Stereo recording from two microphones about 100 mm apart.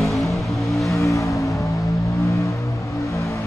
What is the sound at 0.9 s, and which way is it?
Vehicle, 30° left (ahead or behind).